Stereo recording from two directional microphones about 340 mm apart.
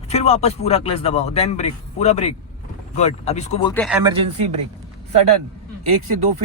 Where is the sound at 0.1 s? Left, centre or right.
Centre.